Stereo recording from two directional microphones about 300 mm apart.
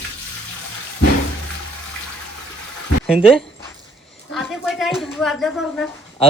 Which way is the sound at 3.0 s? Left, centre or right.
Centre.